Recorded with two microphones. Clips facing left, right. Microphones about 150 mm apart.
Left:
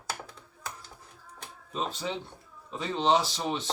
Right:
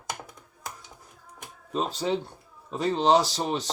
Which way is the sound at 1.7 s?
40° right (ahead or behind).